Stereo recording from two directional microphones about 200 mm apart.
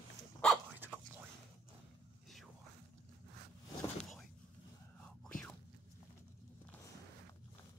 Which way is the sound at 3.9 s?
Centre (ahead or behind).